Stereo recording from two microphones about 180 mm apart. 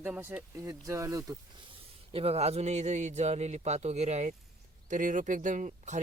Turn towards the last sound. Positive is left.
turn(degrees=-45)  # may be behind; listen again after turning